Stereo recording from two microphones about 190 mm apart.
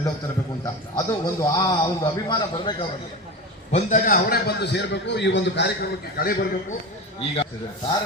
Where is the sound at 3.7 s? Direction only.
40° left (ahead or behind); by 5.7 s 65° left (ahead or behind).